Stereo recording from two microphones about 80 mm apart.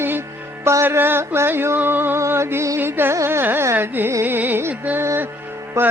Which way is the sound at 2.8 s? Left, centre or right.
Right.